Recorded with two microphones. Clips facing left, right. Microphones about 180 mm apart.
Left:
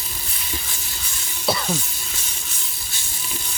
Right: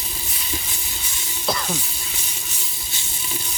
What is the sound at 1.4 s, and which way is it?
Speech, 5° left (ahead or behind).